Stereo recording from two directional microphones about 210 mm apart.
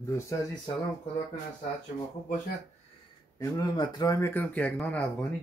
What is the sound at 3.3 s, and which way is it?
Speech, 15° left (ahead or behind).